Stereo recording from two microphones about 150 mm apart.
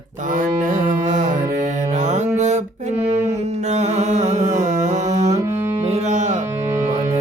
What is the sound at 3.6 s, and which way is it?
Music, 50° right (ahead or behind).